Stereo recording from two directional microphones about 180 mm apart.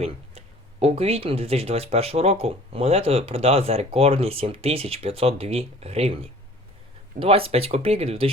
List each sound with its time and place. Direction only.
0.0 s speech: 35° right (ahead or behind)